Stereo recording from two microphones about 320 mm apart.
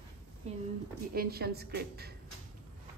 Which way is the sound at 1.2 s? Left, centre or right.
Right.